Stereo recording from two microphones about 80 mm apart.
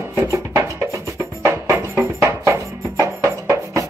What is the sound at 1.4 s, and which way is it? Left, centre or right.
Music, right.